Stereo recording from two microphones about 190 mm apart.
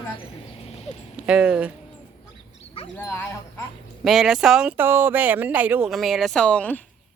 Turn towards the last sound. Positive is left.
turn(degrees=5)  # may be behind; listen again after turning